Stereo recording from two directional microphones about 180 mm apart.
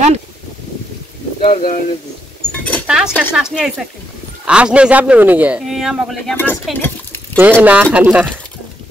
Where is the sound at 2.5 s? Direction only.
5° left (ahead or behind).